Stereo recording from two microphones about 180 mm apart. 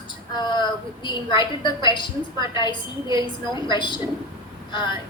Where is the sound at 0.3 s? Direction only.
25° left (ahead or behind).